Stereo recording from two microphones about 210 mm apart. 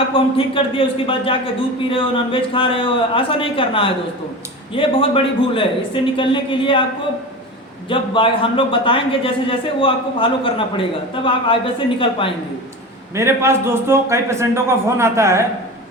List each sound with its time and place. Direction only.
0.1 s a man's voice: 25° left (ahead or behind)
7.9 s a man's voice: 25° left (ahead or behind)
13.1 s a man's voice: 10° right (ahead or behind)